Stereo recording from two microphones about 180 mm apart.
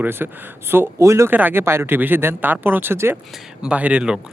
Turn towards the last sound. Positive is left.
turn(degrees=-5)  # may be behind; listen again after turning